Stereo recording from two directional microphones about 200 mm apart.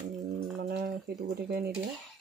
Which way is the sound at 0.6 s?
45° right (ahead or behind).